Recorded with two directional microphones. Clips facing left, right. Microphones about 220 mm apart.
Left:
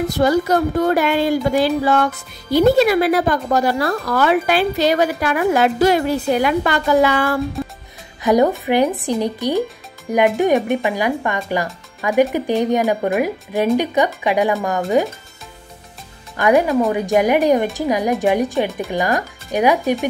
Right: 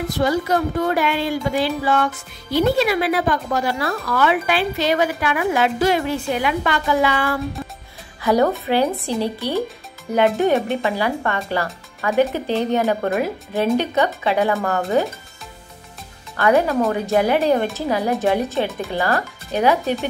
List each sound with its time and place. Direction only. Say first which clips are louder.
0.2 s speech: left 3 dB; 40° left (ahead or behind)
8.2 s speech: left 3 dB; 15° left (ahead or behind)
16.3 s speech: left 2 dB; 15° left (ahead or behind)